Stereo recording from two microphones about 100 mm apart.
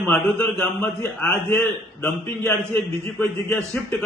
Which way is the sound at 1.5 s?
25° left (ahead or behind).